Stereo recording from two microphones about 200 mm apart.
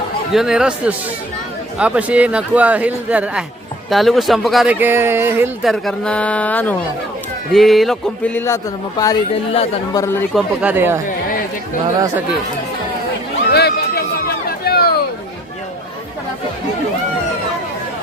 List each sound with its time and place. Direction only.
0.3 s speech: 5° right (ahead or behind)
5.6 s speech: centre (ahead or behind)
10.3 s speech: 5° right (ahead or behind)
13.5 s a sound: 55° left (ahead or behind)